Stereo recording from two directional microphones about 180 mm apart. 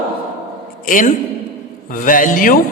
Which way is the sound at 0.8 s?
50° left (ahead or behind).